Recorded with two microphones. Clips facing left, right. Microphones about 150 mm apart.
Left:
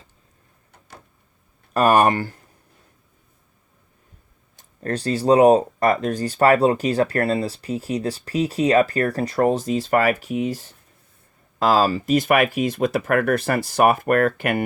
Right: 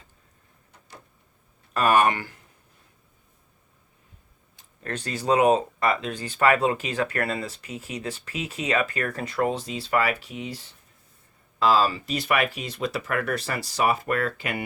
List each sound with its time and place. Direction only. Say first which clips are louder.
1.7 s speech: left 4 dB; 40° left (ahead or behind)
4.8 s speech: left 9 dB; 35° left (ahead or behind); by 14.6 s 55° left (ahead or behind)